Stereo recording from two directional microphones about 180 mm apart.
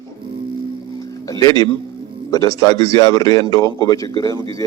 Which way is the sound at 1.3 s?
20° left (ahead or behind).